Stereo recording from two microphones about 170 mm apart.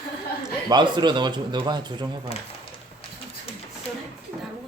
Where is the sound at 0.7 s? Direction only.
25° right (ahead or behind).